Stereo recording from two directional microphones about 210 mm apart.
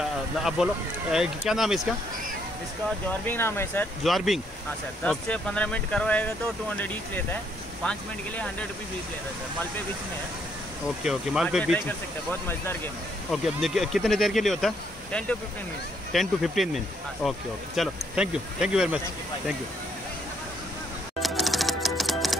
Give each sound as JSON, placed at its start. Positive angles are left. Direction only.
{"t": 0.4, "sound": "speech", "side_deg": 0}
{"t": 3.1, "sound": "speech", "side_deg": 10}
{"t": 4.0, "sound": "speech", "side_deg": 0}
{"t": 11.1, "sound": "speech", "side_deg": 0}
{"t": 13.3, "sound": "speech", "side_deg": 0}
{"t": 16.1, "sound": "speech", "side_deg": 0}
{"t": 21.2, "sound": "music", "side_deg": 0}